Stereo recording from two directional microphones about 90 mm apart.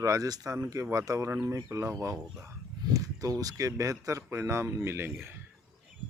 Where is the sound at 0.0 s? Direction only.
40° right (ahead or behind).